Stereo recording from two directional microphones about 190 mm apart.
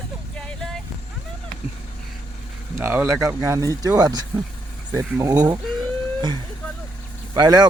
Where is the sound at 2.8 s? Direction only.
10° right (ahead or behind).